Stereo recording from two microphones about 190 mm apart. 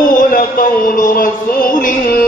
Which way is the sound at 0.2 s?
50° left (ahead or behind).